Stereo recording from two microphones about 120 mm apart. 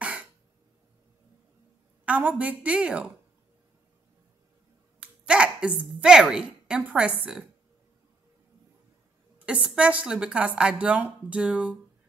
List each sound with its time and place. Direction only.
0.0 s cough: 10° right (ahead or behind)
2.0 s speech: 10° right (ahead or behind)
5.0 s a woman's voice: 10° right (ahead or behind)
9.5 s speech: 10° right (ahead or behind)